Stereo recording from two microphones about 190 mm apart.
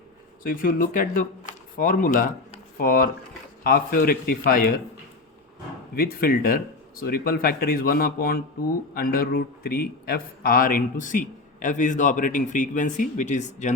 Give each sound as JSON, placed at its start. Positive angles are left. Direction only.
{"t": 0.4, "sound": "a man's voice", "side_deg": 45}
{"t": 5.9, "sound": "a man's voice", "side_deg": 50}